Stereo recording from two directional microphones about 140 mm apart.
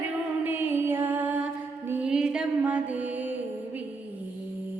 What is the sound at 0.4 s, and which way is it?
Music, 15° right (ahead or behind).